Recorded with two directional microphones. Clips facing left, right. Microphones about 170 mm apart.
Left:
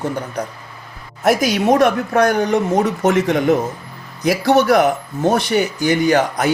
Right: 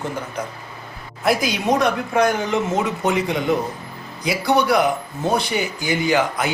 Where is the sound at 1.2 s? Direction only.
45° left (ahead or behind).